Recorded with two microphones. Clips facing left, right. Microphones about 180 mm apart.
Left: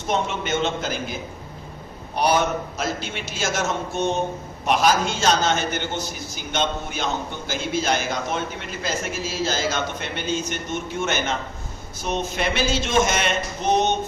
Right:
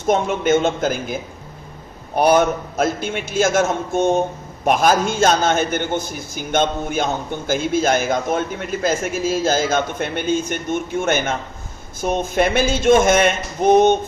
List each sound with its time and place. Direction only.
0.1 s a man's voice: 50° right (ahead or behind)
2.1 s a man's voice: 50° right (ahead or behind)